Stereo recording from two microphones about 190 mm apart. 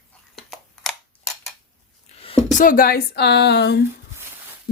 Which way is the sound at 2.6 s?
45° left (ahead or behind).